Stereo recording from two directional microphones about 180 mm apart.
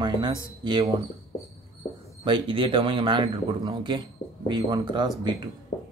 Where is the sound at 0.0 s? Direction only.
25° right (ahead or behind).